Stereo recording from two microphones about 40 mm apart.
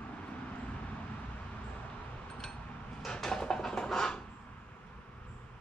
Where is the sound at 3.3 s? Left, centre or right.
Centre.